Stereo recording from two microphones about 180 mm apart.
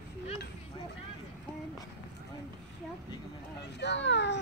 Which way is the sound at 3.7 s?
75° left (ahead or behind).